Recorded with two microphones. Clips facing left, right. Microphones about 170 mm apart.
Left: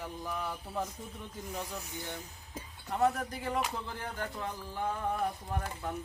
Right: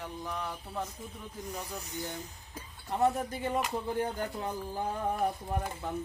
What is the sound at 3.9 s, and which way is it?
Speech, 30° right (ahead or behind).